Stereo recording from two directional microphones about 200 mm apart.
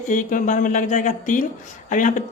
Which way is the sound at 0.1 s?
40° left (ahead or behind).